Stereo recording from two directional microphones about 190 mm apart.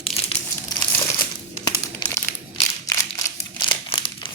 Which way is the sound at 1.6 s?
20° left (ahead or behind).